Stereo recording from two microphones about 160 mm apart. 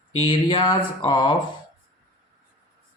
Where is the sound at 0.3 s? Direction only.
35° left (ahead or behind).